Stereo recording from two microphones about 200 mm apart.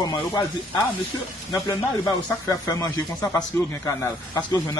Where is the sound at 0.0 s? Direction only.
20° left (ahead or behind).